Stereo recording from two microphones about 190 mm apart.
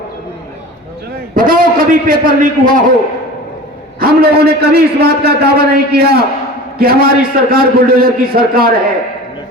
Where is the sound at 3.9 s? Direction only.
55° right (ahead or behind).